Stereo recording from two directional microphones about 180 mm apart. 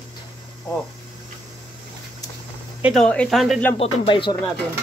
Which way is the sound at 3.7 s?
30° left (ahead or behind).